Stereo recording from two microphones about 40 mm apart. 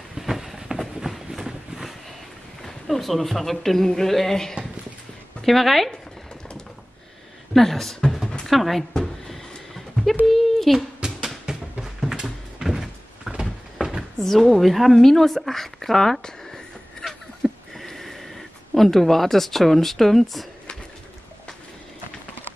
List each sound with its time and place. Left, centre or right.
0.1 s vehicle: centre
2.6 s a man's voice: centre
7.5 s a man's voice: centre
8.3 s a sound: centre
10.2 s speech: centre
11.2 s cupboard open or close: centre
12.6 s door: centre
13.4 s cupboard open or close: centre
14.2 s a woman's voice: centre
17.0 s a sound: centre